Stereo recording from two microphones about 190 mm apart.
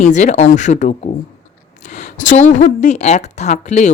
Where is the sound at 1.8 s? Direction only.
40° left (ahead or behind).